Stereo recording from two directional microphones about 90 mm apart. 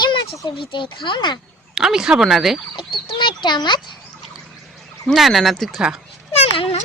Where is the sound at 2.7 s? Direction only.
65° left (ahead or behind).